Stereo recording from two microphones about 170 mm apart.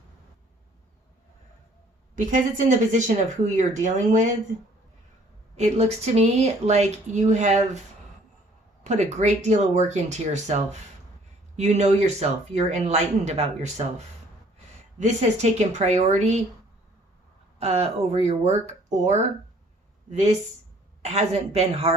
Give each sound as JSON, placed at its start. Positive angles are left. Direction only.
{"t": 2.1, "sound": "speech", "side_deg": -45}
{"t": 5.5, "sound": "speech", "side_deg": -40}
{"t": 8.8, "sound": "speech", "side_deg": -45}
{"t": 14.9, "sound": "speech", "side_deg": -40}
{"t": 17.6, "sound": "speech", "side_deg": -35}